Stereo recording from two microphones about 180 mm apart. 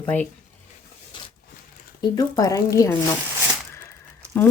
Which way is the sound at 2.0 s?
20° left (ahead or behind).